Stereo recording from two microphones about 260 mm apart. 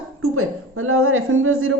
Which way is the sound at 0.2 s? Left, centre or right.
Right.